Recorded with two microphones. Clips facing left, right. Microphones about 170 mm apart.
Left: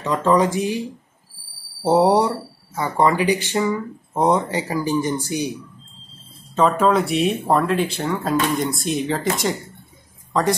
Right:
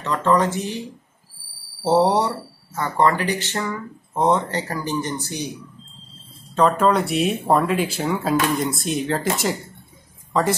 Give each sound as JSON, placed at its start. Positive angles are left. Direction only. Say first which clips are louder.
{"t": 0.0, "sound": "speech", "louder": "left 2 dB", "side_deg": 10}
{"t": 6.5, "sound": "speech", "louder": "left 1 dB", "side_deg": 0}